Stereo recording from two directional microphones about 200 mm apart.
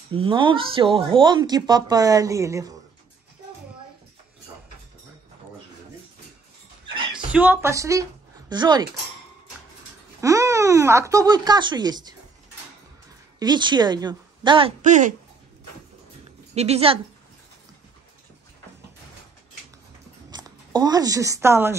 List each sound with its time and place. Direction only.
0.1 s a woman's voice: 25° right (ahead or behind)
7.3 s speech: 10° right (ahead or behind)
10.2 s speech: 15° right (ahead or behind)
13.4 s a woman's voice: 20° right (ahead or behind)
14.8 s a woman's voice: 40° right (ahead or behind)
16.5 s a woman's voice: 30° right (ahead or behind)
20.2 s speech: 20° right (ahead or behind)